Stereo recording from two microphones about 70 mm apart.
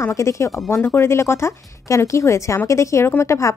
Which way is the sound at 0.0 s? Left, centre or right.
Left.